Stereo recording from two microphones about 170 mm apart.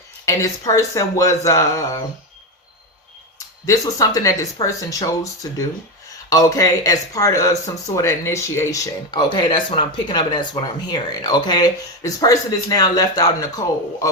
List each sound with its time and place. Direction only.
0.3 s speech: 20° left (ahead or behind)
3.3 s speech: 20° left (ahead or behind)